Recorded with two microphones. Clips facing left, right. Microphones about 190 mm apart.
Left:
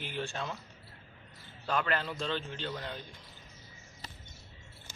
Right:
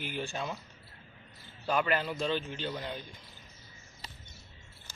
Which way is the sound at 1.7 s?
10° right (ahead or behind).